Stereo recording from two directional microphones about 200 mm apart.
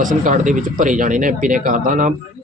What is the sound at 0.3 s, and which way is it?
A man's voice, 40° right (ahead or behind).